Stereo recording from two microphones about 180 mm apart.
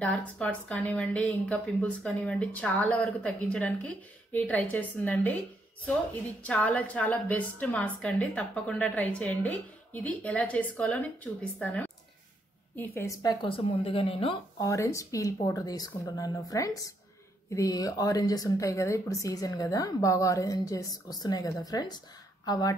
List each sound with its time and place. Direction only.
0.0 s a woman's voice: 5° left (ahead or behind)
6.4 s a woman's voice: 10° left (ahead or behind); by 14.3 s 30° left (ahead or behind)
14.6 s speech: 15° left (ahead or behind)